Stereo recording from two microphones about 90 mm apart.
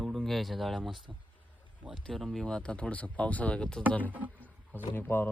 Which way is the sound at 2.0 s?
Centre (ahead or behind).